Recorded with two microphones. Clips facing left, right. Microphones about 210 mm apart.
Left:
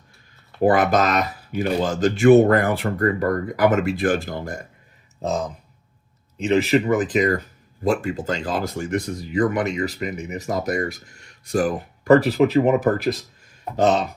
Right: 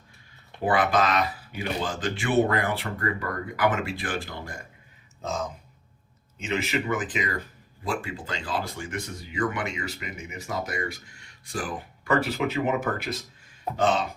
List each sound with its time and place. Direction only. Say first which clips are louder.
0.6 s speech: left 6 dB; 45° left (ahead or behind)
6.3 s speech: left 10 dB; 35° left (ahead or behind)